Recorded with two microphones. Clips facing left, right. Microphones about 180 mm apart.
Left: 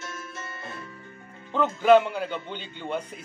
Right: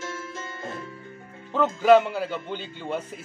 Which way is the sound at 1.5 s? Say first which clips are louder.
Right 1 dB; 5° right (ahead or behind).